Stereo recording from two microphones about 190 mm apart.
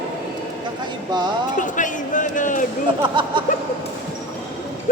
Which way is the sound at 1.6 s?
40° left (ahead or behind).